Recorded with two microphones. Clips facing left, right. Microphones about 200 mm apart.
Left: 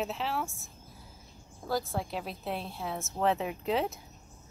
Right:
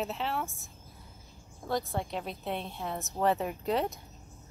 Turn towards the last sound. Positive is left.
turn(degrees=0)  # may be behind; listen again after turning